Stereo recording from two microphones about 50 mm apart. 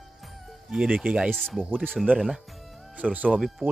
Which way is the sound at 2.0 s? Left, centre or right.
Centre.